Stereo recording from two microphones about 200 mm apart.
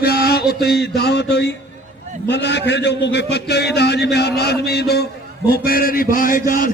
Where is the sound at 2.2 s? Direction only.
60° left (ahead or behind).